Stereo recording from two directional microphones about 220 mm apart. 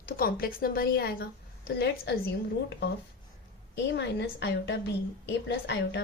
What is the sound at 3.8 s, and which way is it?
A woman's voice, 50° left (ahead or behind).